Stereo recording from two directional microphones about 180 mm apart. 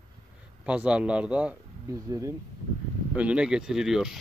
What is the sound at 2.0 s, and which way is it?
Speech, 15° right (ahead or behind).